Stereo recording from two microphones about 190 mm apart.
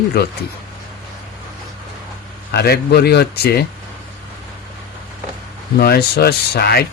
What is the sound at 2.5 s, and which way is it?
Speech, 55° left (ahead or behind).